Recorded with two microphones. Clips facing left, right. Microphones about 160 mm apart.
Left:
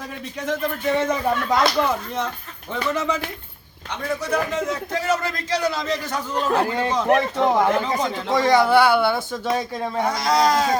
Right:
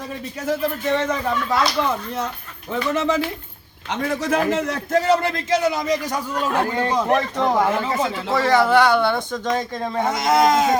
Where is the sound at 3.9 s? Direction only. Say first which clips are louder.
Right 3 dB; 90° right.